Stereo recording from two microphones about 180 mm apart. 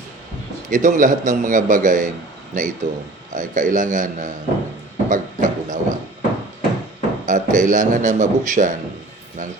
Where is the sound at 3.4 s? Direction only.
45° right (ahead or behind).